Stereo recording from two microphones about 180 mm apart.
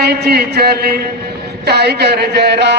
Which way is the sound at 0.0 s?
60° right (ahead or behind).